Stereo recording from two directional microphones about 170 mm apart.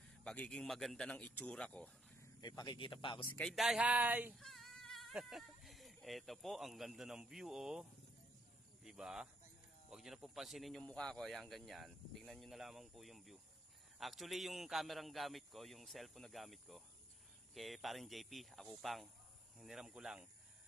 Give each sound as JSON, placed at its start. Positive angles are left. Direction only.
{"t": 0.2, "sound": "speech", "side_deg": 5}
{"t": 2.4, "sound": "speech", "side_deg": 25}
{"t": 3.3, "sound": "speech", "side_deg": 0}
{"t": 4.4, "sound": "speech", "side_deg": 0}